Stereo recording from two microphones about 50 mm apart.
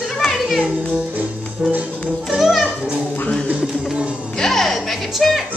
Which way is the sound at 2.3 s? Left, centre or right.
Centre.